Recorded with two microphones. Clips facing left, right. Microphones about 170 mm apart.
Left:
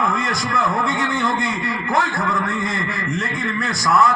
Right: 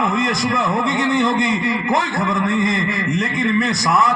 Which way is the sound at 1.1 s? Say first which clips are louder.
Right 5 dB; 20° right (ahead or behind).